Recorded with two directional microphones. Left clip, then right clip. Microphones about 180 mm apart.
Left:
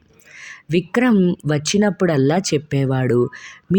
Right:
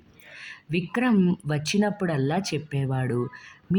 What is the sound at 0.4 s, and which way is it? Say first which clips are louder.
Speech: left 9 dB; 25° left (ahead or behind).